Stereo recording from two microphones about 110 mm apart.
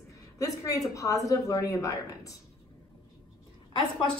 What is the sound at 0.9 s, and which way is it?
A woman's voice, 30° left (ahead or behind).